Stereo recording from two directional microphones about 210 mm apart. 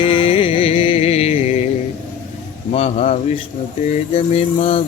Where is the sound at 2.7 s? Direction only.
30° left (ahead or behind).